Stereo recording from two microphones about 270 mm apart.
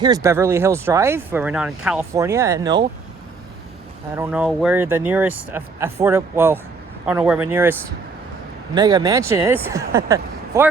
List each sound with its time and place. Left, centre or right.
0.0 s speech: centre
4.1 s speech: centre